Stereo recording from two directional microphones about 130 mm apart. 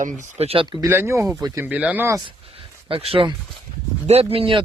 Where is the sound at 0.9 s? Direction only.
20° right (ahead or behind).